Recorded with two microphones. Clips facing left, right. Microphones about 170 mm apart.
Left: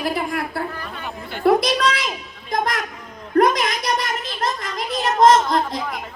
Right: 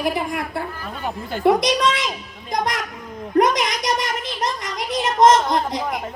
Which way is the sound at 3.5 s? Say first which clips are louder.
Even; 20° right (ahead or behind).